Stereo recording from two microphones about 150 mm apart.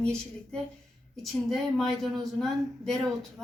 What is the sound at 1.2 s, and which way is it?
A woman's voice, centre (ahead or behind).